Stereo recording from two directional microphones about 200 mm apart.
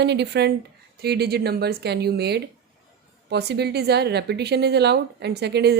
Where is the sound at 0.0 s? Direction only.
60° right (ahead or behind).